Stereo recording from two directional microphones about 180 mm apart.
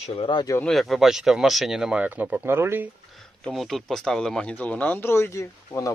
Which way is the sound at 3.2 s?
5° left (ahead or behind).